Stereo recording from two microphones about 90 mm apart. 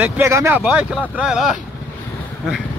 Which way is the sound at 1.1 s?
10° right (ahead or behind).